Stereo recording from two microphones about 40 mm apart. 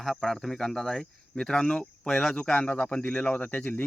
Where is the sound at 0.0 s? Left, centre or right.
Centre.